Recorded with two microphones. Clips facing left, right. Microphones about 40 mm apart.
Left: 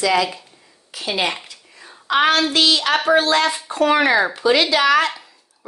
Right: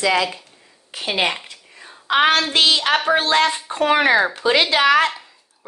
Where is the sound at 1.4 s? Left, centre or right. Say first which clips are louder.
Right 1 dB; right.